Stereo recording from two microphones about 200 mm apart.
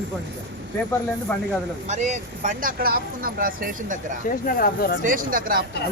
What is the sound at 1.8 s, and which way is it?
Speech, 35° right (ahead or behind).